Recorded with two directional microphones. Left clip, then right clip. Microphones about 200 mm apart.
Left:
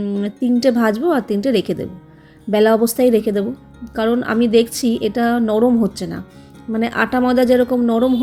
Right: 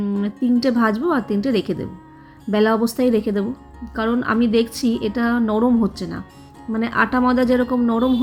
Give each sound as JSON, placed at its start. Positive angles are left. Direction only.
{"t": 0.0, "sound": "a woman's voice", "side_deg": 15}